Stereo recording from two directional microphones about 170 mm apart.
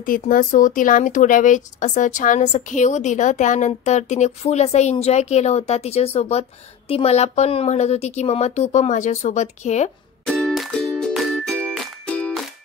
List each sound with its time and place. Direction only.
0.0 s a woman's voice: 55° left (ahead or behind)
10.2 s music: centre (ahead or behind)